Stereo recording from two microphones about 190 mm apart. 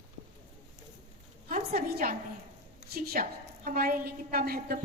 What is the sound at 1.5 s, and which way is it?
A woman's voice, 50° right (ahead or behind).